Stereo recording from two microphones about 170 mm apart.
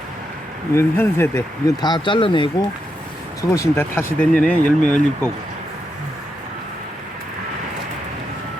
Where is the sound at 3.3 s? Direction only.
20° left (ahead or behind).